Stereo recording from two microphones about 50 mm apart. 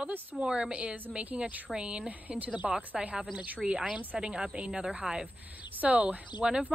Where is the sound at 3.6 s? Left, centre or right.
Centre.